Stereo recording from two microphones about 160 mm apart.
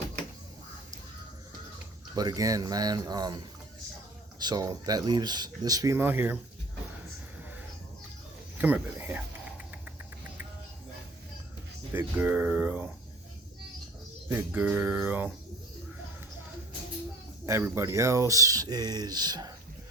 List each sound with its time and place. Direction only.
2.1 s speech: 25° right (ahead or behind)
8.5 s speech: 10° right (ahead or behind)
11.9 s speech: 10° right (ahead or behind)
14.3 s speech: 10° right (ahead or behind)
17.4 s speech: 15° right (ahead or behind)